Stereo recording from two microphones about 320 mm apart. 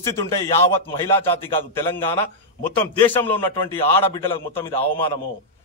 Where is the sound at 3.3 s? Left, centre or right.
Centre.